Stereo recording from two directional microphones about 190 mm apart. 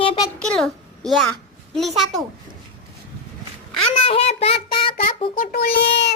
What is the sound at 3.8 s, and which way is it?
A child's voice, 30° left (ahead or behind).